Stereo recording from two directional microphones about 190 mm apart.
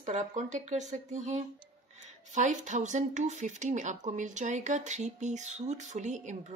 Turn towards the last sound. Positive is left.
turn(degrees=-40)  # may be behind; listen again after turning